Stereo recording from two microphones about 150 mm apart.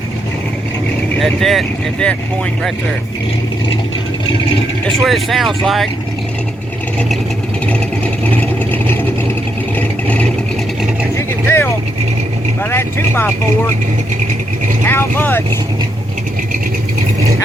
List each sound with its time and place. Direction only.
1.2 s speech: centre (ahead or behind)
4.9 s speech: centre (ahead or behind)
7.7 s vehicle: 10° left (ahead or behind)
11.4 s vehicle: 15° left (ahead or behind)
12.7 s speech: 15° left (ahead or behind)
14.8 s speech: 15° left (ahead or behind)